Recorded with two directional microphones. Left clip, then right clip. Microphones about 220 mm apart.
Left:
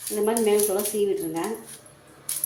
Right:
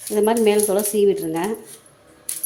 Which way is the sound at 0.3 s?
50° right (ahead or behind).